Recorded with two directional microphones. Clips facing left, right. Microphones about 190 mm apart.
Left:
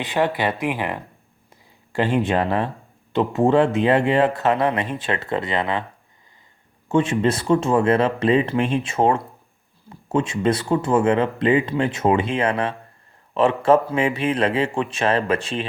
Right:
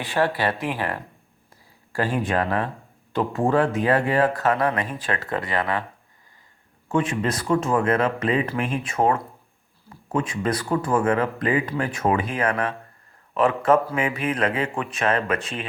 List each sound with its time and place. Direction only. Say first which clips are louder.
0.0 s speech: left 2 dB; 20° left (ahead or behind)
6.8 s speech: left 4 dB; 25° left (ahead or behind)